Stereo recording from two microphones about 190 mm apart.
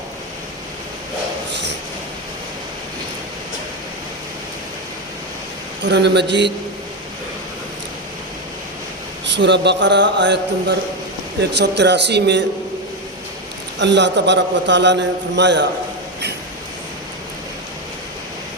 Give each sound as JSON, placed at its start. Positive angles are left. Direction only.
{"t": 5.8, "sound": "a man's voice", "side_deg": -65}
{"t": 9.2, "sound": "a man's voice", "side_deg": -65}
{"t": 13.7, "sound": "a man's voice", "side_deg": -65}